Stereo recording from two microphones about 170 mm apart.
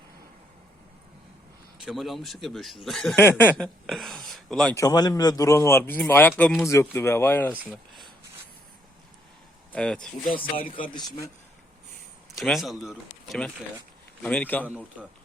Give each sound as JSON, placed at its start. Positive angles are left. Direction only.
{"t": 1.8, "sound": "speech", "side_deg": 0}
{"t": 3.2, "sound": "speech", "side_deg": 10}
{"t": 3.8, "sound": "speech", "side_deg": 0}
{"t": 4.8, "sound": "speech", "side_deg": 20}
{"t": 6.7, "sound": "speech", "side_deg": 15}
{"t": 7.7, "sound": "a sound", "side_deg": 0}
{"t": 9.7, "sound": "speech", "side_deg": 5}
{"t": 10.4, "sound": "speech", "side_deg": 30}
{"t": 12.4, "sound": "speech", "side_deg": 0}
{"t": 14.7, "sound": "speech", "side_deg": -10}